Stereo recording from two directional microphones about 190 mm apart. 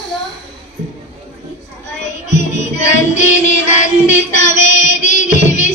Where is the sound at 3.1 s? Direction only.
40° left (ahead or behind).